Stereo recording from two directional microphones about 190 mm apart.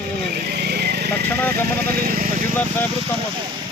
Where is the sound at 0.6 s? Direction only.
55° right (ahead or behind).